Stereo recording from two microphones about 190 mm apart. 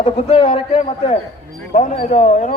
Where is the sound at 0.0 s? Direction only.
35° left (ahead or behind).